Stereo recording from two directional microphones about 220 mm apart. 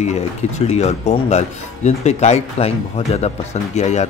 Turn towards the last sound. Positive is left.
turn(degrees=30)  # may be behind; listen again after turning